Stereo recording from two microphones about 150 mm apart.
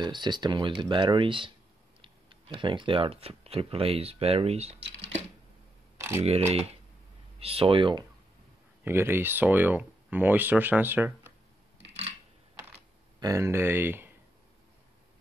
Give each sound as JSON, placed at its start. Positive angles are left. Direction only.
{"t": 0.0, "sound": "speech", "side_deg": -30}
{"t": 5.9, "sound": "camera", "side_deg": -15}
{"t": 7.3, "sound": "speech", "side_deg": -40}
{"t": 8.8, "sound": "speech", "side_deg": -15}
{"t": 13.2, "sound": "speech", "side_deg": -20}